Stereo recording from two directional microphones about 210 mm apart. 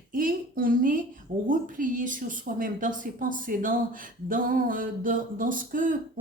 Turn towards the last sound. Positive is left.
turn(degrees=-40)  # may be behind; listen again after turning